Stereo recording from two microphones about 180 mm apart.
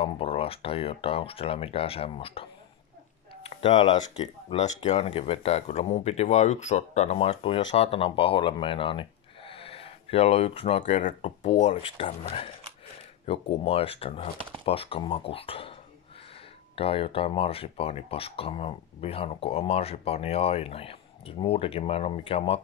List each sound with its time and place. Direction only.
0.0 s speech: 30° left (ahead or behind)
3.4 s speech: 30° left (ahead or behind)
11.0 s speech: 45° left (ahead or behind)
16.7 s speech: 30° left (ahead or behind)